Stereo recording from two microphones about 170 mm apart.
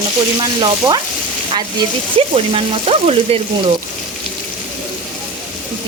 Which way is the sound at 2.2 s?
35° right (ahead or behind).